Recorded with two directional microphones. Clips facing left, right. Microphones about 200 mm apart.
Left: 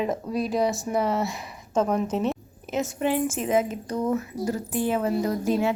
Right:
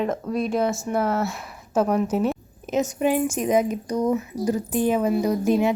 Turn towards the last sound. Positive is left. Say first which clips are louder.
# right 3 dB
turn(degrees=-15)  # may be behind; listen again after turning